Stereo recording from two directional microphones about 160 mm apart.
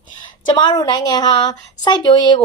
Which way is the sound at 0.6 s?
25° left (ahead or behind).